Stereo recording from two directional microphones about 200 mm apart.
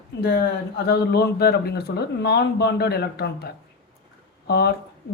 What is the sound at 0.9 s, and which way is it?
Speech, 55° left (ahead or behind).